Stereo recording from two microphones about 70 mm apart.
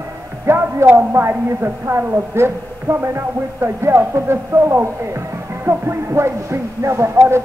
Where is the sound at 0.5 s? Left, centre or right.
Right.